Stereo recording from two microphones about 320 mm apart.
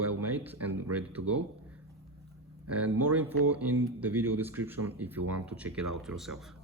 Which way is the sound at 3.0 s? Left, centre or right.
Centre.